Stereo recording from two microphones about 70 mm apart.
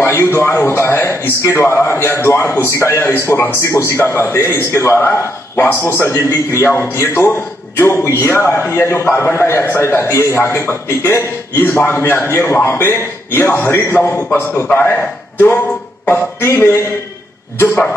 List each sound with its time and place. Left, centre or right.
0.0 s a man's voice: left